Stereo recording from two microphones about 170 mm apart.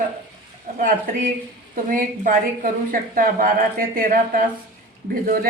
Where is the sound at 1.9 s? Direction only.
50° right (ahead or behind).